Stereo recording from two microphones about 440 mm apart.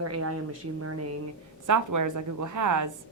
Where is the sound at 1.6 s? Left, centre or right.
Right.